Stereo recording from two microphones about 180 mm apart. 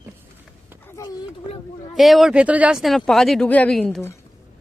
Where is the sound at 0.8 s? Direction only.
20° left (ahead or behind).